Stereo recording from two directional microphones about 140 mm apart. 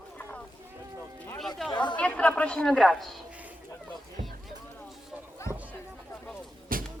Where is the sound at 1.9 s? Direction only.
10° left (ahead or behind).